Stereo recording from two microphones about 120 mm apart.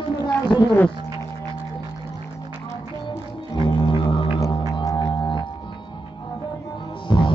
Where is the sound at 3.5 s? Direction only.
40° left (ahead or behind).